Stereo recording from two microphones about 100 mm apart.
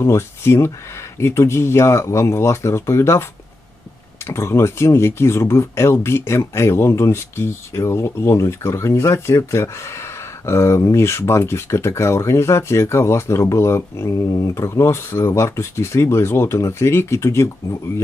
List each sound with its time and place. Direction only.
0.0 s speech: 25° left (ahead or behind)
4.3 s speech: 30° left (ahead or behind)